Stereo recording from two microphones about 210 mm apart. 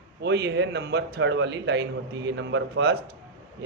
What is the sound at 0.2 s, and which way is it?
A man's voice, 55° right (ahead or behind).